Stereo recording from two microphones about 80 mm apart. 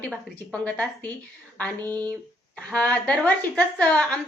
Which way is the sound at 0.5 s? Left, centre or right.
Centre.